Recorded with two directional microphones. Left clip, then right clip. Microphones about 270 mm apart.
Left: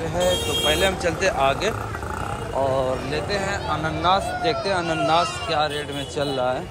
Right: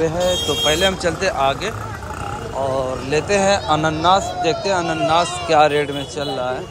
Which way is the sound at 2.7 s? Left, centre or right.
Centre.